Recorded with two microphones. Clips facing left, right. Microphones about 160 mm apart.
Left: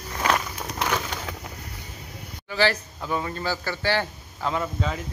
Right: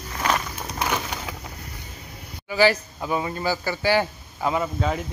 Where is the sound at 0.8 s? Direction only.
5° right (ahead or behind).